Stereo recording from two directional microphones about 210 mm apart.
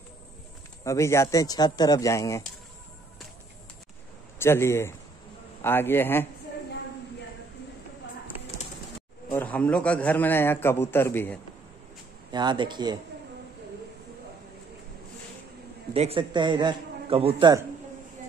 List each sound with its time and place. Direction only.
0.8 s a man's voice: 15° left (ahead or behind)
4.4 s a man's voice: 10° left (ahead or behind)
9.3 s a man's voice: 5° left (ahead or behind)
12.3 s a man's voice: 20° right (ahead or behind)
15.9 s a man's voice: 25° right (ahead or behind)